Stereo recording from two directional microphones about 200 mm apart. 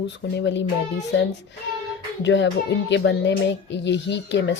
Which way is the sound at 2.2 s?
65° left (ahead or behind).